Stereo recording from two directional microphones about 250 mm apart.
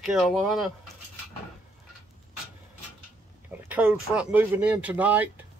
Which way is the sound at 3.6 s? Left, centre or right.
Centre.